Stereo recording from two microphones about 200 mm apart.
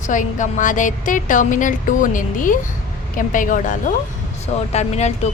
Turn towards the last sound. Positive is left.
turn(degrees=35)  # may be behind; listen again after turning